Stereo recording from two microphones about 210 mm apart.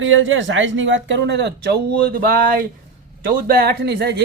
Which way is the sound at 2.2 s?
45° right (ahead or behind).